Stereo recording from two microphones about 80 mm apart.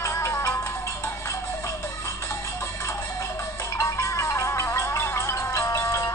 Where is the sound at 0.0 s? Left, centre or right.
Left.